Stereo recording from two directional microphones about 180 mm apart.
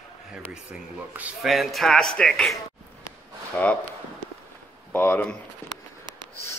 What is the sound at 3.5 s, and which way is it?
Speech, 10° left (ahead or behind).